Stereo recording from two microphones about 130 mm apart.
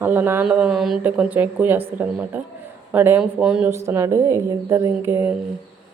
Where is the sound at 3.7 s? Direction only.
20° right (ahead or behind).